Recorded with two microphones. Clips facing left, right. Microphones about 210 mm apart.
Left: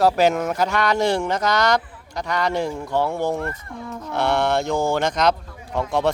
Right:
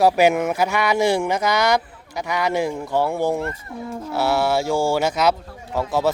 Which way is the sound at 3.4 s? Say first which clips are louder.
Right 1 dB; 25° right (ahead or behind).